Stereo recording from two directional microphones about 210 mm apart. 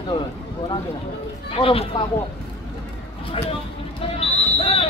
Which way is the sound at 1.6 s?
25° left (ahead or behind).